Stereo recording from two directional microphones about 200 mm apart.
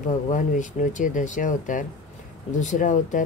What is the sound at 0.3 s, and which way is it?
Speech, 40° left (ahead or behind).